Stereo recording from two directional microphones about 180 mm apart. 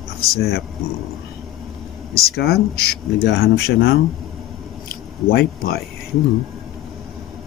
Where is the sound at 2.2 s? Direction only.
60° left (ahead or behind).